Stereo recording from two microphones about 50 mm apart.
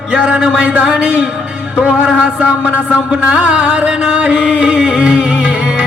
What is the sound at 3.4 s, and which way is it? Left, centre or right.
Music, right.